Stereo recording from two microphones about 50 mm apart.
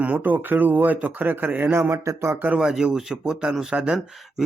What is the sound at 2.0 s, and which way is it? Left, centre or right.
Speech, right.